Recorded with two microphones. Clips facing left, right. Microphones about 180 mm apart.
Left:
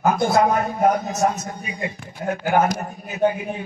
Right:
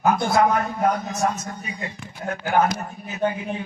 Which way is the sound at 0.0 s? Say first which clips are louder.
Left 1 dB; 15° left (ahead or behind).